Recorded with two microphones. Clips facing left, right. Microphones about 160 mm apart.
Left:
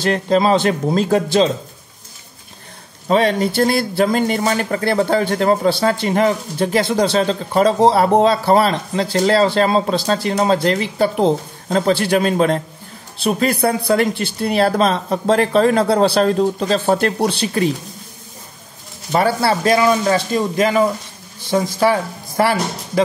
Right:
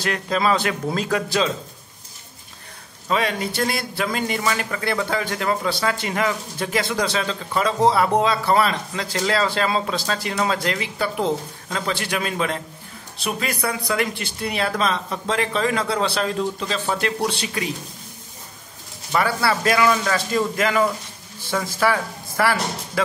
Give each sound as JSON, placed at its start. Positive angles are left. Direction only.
{"t": 0.0, "sound": "a man's voice", "side_deg": 30}
{"t": 3.1, "sound": "speech", "side_deg": 35}
{"t": 19.1, "sound": "a man's voice", "side_deg": 30}